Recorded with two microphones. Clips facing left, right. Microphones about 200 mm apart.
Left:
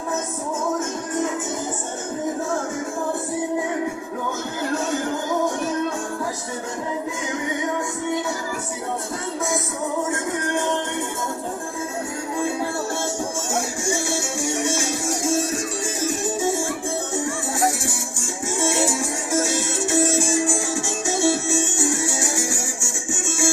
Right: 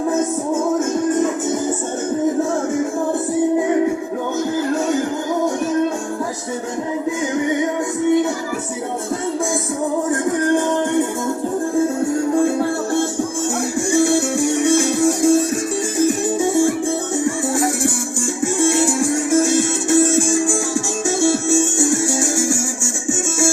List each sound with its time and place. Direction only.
12.5 s music: 55° right (ahead or behind)
18.6 s music: 55° right (ahead or behind)